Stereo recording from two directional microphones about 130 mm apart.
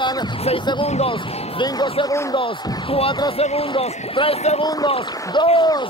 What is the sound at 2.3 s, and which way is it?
Speech, 45° left (ahead or behind).